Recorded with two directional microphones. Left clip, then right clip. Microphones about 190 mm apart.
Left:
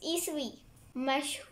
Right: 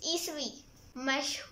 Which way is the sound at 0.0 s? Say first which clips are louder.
Even; 15° left (ahead or behind).